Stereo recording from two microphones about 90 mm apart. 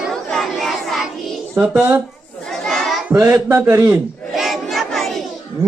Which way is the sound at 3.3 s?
25° right (ahead or behind).